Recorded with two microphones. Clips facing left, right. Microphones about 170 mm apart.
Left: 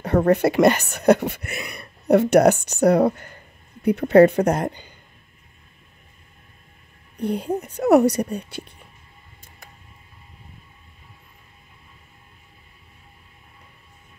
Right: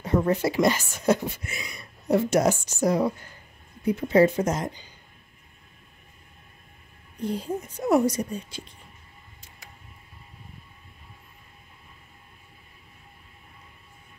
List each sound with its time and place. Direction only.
0.0 s speech: 65° left (ahead or behind)
7.2 s speech: 65° left (ahead or behind)